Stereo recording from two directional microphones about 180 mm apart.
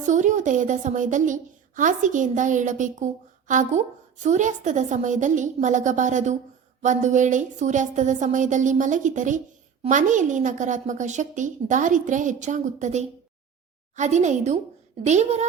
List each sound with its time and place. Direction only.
0.0 s a woman's voice: 45° right (ahead or behind)